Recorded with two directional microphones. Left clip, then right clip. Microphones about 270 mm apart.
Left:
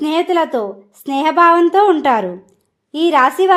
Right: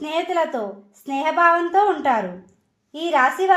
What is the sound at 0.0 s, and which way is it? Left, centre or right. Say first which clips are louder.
A woman's voice: left 6 dB; left.